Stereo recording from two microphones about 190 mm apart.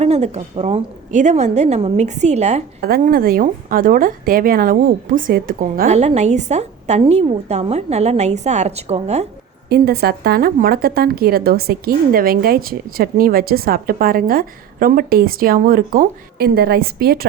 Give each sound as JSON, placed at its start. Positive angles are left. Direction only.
{"t": 0.0, "sound": "speech", "side_deg": -35}
{"t": 2.8, "sound": "speech", "side_deg": -50}
{"t": 9.6, "sound": "speech", "side_deg": -55}